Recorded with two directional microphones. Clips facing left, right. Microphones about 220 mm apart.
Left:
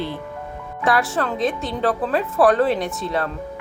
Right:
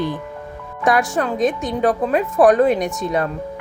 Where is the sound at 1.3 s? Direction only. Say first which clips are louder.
Right 4 dB; 45° right (ahead or behind).